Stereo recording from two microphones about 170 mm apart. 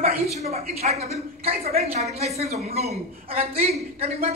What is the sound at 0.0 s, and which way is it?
A woman's voice, 40° right (ahead or behind).